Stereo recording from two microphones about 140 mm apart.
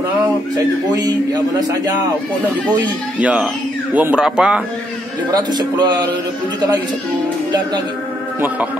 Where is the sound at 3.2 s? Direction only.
10° right (ahead or behind).